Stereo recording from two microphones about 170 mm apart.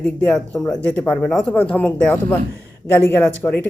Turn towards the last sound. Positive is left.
turn(degrees=10)  # may be behind; listen again after turning